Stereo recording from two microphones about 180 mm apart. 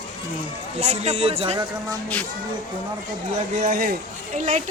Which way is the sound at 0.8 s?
35° right (ahead or behind).